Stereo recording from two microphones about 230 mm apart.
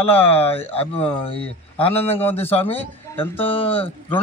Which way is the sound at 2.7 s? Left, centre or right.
Centre.